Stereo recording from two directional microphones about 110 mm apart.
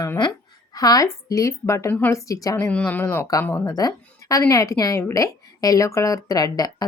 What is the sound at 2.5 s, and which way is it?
Speech, 20° left (ahead or behind).